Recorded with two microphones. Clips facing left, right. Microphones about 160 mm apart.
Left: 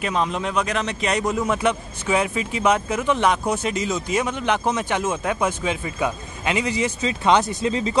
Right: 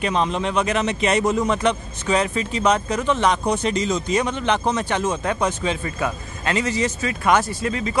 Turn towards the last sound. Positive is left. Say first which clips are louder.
# left 2 dB
turn(degrees=25)  # may be behind; listen again after turning